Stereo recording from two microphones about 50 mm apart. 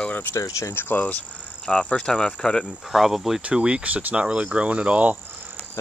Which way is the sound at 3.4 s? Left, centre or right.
Right.